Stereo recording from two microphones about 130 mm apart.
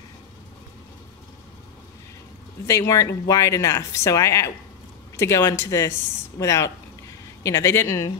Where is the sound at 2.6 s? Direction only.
25° left (ahead or behind).